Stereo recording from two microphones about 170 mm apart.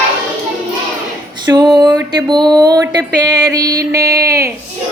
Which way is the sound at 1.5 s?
25° right (ahead or behind).